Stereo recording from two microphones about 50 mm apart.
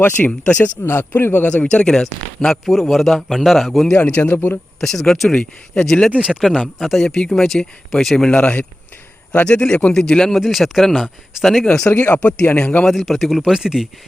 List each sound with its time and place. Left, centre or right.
0.3 s a man's voice: left
0.9 s a man's voice: left
1.5 s a man's voice: left; by 3.9 s centre
3.9 s a man's voice: left
4.2 s speech: left
4.8 s a man's voice: centre
5.4 s a man's voice: centre
6.1 s speech: centre
6.7 s speech: centre
8.3 s a man's voice: left; by 11.1 s centre
11.6 s speech: centre
11.9 s a man's voice: left
12.8 s a man's voice: centre